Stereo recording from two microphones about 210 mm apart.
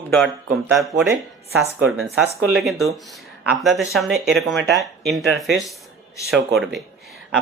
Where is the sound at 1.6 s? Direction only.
5° right (ahead or behind).